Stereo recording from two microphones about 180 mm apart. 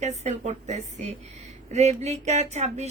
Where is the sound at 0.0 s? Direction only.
40° right (ahead or behind).